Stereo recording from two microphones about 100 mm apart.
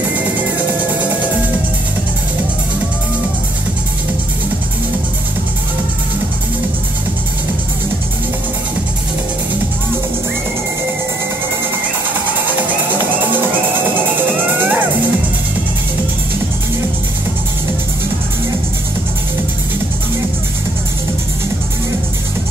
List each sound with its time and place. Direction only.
14.2 s music: 20° right (ahead or behind)